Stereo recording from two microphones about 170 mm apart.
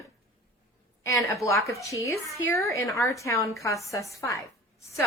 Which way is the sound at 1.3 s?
20° left (ahead or behind).